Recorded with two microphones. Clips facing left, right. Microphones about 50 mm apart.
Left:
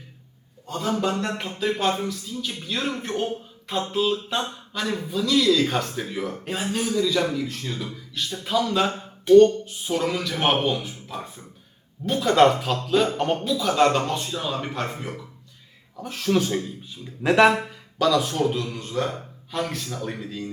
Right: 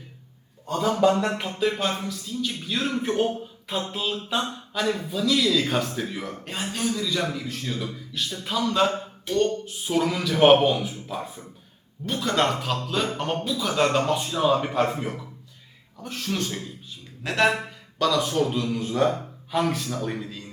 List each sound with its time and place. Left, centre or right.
1.1 s a sound: right
1.4 s speech: centre
1.8 s a man's voice: centre
16.0 s speech: centre
18.0 s speech: centre